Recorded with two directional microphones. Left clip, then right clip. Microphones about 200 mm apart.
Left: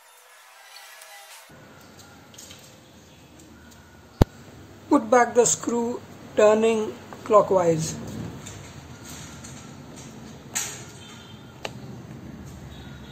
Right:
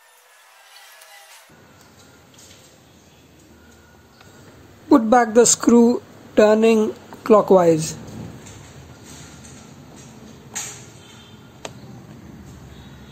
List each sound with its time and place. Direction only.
4.8 s a woman's voice: 25° right (ahead or behind)